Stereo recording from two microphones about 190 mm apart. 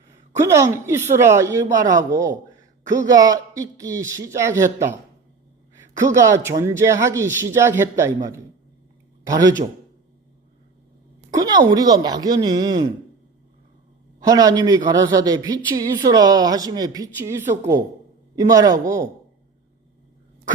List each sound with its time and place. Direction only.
0.3 s a man's voice: 15° right (ahead or behind)
6.0 s a man's voice: 15° right (ahead or behind)
11.3 s a woman's voice: 20° right (ahead or behind)
14.2 s a woman's voice: 20° right (ahead or behind)